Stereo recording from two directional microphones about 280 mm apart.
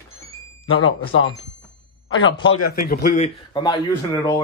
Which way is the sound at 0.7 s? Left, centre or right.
Left.